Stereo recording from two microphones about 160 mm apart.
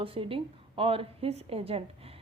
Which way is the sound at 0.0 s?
35° right (ahead or behind).